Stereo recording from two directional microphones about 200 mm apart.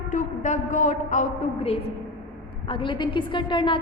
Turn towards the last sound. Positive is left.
turn(degrees=25)  # may be behind; listen again after turning